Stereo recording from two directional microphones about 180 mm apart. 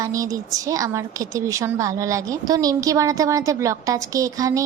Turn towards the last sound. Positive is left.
turn(degrees=-20)  # may be behind; listen again after turning